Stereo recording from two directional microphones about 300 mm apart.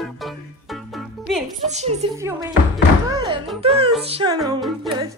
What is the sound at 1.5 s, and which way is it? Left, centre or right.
Speech, right.